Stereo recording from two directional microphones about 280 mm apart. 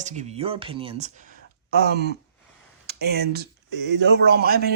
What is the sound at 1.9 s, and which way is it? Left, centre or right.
A man's voice, right.